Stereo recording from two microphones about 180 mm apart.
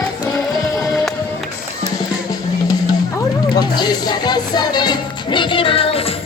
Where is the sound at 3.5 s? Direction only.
25° left (ahead or behind).